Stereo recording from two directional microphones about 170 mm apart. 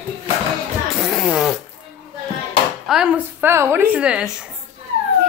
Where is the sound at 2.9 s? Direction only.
5° right (ahead or behind).